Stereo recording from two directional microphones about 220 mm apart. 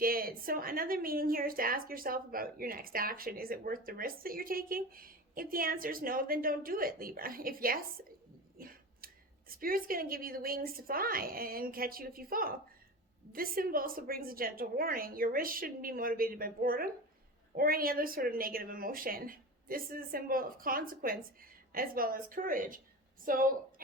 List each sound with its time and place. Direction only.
0.0 s a woman's voice: 40° right (ahead or behind)
8.5 s finger snapping: 40° right (ahead or behind)
9.5 s a woman's voice: 40° right (ahead or behind)